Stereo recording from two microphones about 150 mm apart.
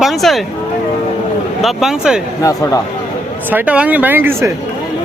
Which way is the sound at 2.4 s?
20° left (ahead or behind).